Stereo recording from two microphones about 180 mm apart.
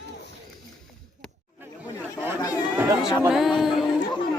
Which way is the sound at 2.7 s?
10° right (ahead or behind).